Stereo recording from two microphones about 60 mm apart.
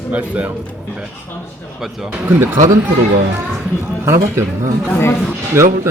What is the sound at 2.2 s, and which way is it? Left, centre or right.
Speech, right.